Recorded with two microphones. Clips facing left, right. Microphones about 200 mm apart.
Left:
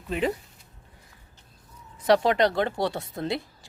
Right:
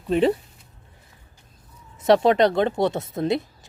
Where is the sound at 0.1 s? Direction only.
30° right (ahead or behind).